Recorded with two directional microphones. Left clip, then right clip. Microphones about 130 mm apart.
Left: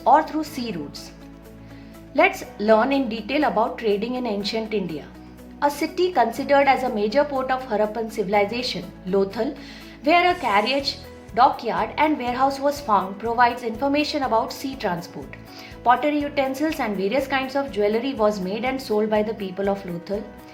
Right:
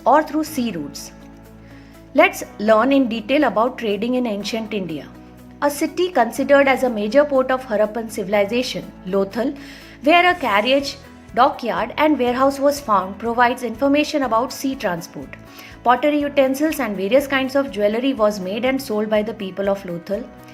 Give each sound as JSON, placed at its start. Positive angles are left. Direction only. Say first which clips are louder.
{"t": 0.0, "sound": "a woman's voice", "louder": "right 2 dB", "side_deg": -35}
{"t": 2.1, "sound": "a woman's voice", "louder": "right 4 dB", "side_deg": -40}